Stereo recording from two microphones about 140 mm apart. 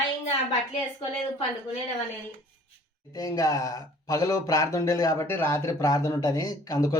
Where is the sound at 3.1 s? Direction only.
25° left (ahead or behind).